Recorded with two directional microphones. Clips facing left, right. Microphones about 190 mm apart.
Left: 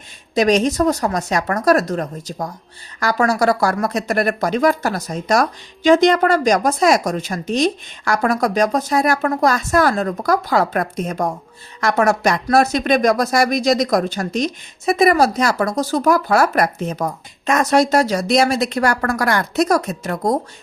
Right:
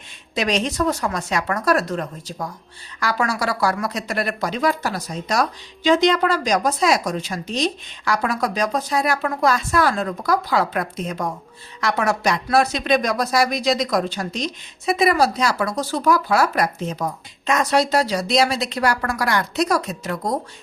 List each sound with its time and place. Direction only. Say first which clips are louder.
0.3 s a woman's voice: left 6 dB; 45° left (ahead or behind)